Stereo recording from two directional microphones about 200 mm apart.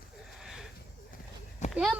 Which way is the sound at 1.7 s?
Centre (ahead or behind).